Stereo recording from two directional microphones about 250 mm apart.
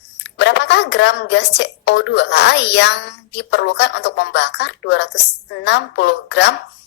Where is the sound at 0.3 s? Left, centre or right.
Left.